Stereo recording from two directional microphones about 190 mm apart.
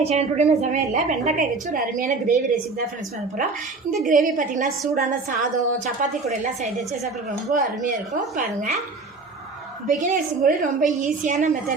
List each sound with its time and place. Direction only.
0.0 s a woman's voice: 35° right (ahead or behind)
4.0 s a woman's voice: 45° right (ahead or behind)
7.5 s a woman's voice: 45° right (ahead or behind)
9.8 s a woman's voice: 45° right (ahead or behind)